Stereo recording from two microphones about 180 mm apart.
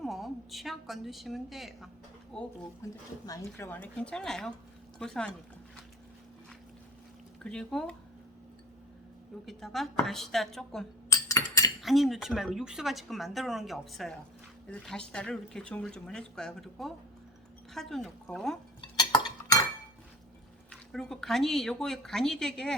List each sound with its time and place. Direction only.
0.0 s a woman's voice: centre (ahead or behind)
2.8 s speech: 15° left (ahead or behind)
7.4 s speech: 5° left (ahead or behind)
9.5 s speech: centre (ahead or behind)
11.1 s a sound: 20° left (ahead or behind)
11.8 s speech: centre (ahead or behind)
18.8 s cutlery: 20° left (ahead or behind)
20.7 s speech: 5° left (ahead or behind)